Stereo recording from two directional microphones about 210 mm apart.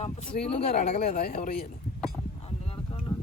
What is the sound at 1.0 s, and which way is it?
Speech, 50° left (ahead or behind).